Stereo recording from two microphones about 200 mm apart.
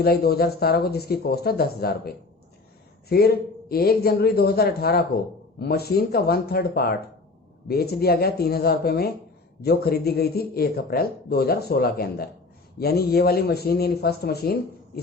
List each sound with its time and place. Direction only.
0.0 s speech: 50° left (ahead or behind)